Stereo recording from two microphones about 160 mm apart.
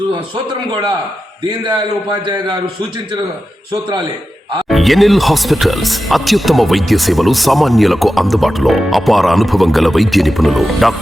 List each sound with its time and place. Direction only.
1.5 s a man's voice: 25° right (ahead or behind)
4.7 s speech: centre (ahead or behind)